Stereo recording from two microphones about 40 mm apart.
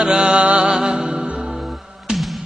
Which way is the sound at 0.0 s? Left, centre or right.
Centre.